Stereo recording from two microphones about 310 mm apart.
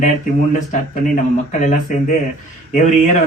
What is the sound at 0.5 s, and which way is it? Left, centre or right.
A man's voice, left.